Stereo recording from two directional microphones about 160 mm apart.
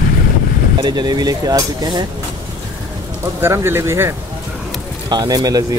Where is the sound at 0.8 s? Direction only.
25° right (ahead or behind).